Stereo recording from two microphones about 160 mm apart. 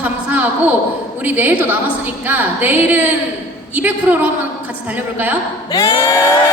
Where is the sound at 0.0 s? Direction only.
10° right (ahead or behind).